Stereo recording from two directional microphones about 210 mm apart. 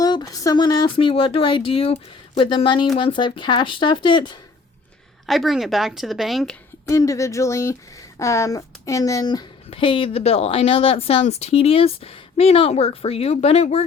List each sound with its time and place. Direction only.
0.0 s speech: 20° left (ahead or behind)
5.2 s a woman's voice: centre (ahead or behind)
6.8 s speech: 15° left (ahead or behind)